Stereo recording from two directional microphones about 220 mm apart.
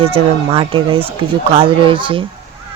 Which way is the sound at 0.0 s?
25° right (ahead or behind).